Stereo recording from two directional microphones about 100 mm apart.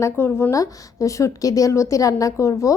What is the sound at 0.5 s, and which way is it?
A woman's voice, 35° left (ahead or behind).